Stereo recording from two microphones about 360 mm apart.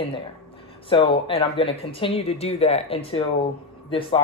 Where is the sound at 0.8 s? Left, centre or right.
Centre.